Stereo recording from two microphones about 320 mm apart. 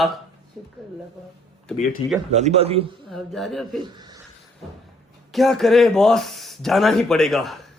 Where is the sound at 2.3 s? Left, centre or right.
Centre.